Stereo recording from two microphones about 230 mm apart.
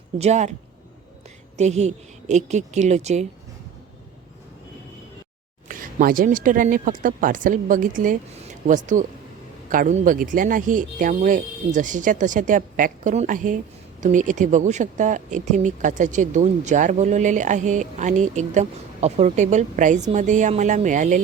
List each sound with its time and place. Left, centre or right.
0.2 s speech: right
1.5 s speech: right
5.6 s speech: right